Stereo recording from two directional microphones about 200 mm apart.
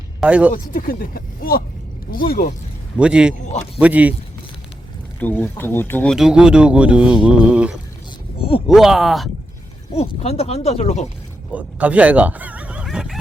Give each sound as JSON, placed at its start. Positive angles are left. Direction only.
{"t": 0.2, "sound": "speech", "side_deg": -5}
{"t": 0.5, "sound": "speech", "side_deg": 45}
{"t": 3.0, "sound": "speech", "side_deg": -5}
{"t": 5.2, "sound": "speech", "side_deg": 10}
{"t": 9.9, "sound": "speech", "side_deg": 30}
{"t": 11.5, "sound": "speech", "side_deg": -5}